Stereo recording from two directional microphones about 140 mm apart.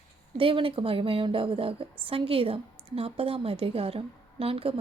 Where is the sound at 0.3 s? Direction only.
40° right (ahead or behind).